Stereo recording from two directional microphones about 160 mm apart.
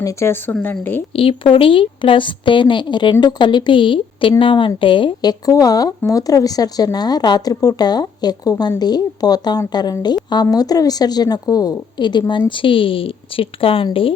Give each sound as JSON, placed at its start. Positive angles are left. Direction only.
{"t": 0.0, "sound": "speech", "side_deg": 20}
{"t": 1.1, "sound": "a woman's voice", "side_deg": 35}